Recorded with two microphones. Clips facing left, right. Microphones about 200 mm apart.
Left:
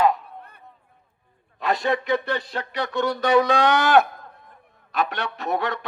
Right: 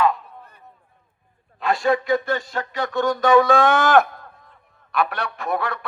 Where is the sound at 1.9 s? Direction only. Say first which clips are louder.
Right 5 dB; 40° right (ahead or behind).